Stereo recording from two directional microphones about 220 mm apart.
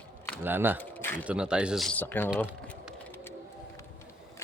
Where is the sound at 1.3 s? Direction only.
5° right (ahead or behind).